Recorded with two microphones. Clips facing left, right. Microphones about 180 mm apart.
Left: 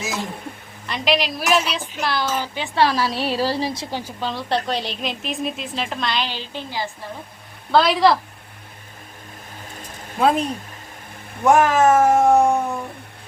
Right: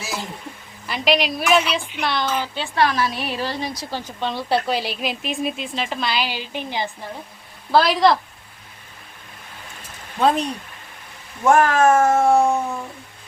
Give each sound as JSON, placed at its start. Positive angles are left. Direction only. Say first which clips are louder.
{"t": 0.9, "sound": "speech", "louder": "right 1 dB", "side_deg": 0}
{"t": 2.7, "sound": "a woman's voice", "louder": "left 1 dB", "side_deg": 30}
{"t": 3.9, "sound": "speech", "louder": "even", "side_deg": 5}
{"t": 7.7, "sound": "speech", "louder": "even", "side_deg": 0}
{"t": 10.2, "sound": "speech", "louder": "even", "side_deg": 5}
{"t": 11.4, "sound": "speech", "louder": "even", "side_deg": 15}